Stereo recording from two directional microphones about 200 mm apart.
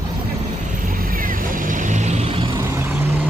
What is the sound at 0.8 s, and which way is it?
Vehicle, 45° right (ahead or behind).